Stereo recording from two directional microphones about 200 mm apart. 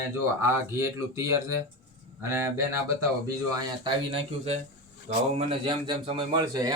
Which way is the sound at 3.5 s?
25° right (ahead or behind).